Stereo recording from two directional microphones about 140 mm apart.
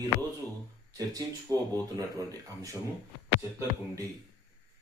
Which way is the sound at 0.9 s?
25° right (ahead or behind).